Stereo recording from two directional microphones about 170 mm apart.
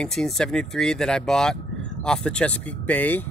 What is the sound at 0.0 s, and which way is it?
Speech, 5° left (ahead or behind).